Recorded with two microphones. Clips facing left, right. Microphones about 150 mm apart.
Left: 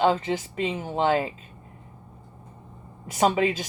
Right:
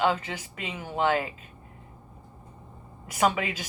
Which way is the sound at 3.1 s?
35° left (ahead or behind).